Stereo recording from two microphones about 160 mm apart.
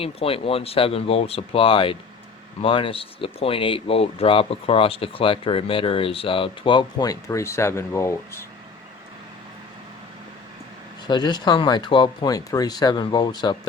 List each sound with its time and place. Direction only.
0.0 s speech: 35° left (ahead or behind); by 8.4 s 15° left (ahead or behind)
11.0 s speech: 25° left (ahead or behind)